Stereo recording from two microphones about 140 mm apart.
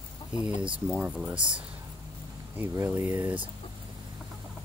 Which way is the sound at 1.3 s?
35° right (ahead or behind).